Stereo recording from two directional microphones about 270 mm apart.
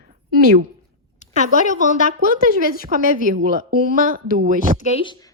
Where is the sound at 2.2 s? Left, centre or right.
Right.